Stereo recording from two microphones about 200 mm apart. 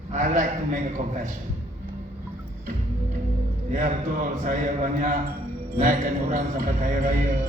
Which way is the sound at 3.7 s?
40° right (ahead or behind).